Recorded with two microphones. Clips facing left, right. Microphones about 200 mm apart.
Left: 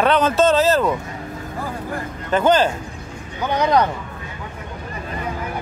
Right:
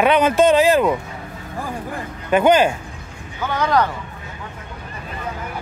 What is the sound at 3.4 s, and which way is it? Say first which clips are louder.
Speech: left 1 dB; 20° left (ahead or behind).